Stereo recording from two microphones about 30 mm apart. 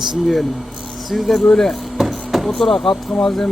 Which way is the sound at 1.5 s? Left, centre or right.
Centre.